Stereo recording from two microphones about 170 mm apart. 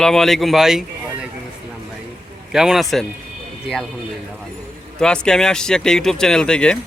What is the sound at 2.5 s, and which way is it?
Speech, 5° right (ahead or behind).